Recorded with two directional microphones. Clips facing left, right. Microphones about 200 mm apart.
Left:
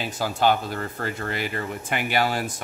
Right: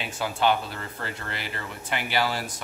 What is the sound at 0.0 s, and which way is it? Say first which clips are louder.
A man's voice: left 3 dB; 40° left (ahead or behind).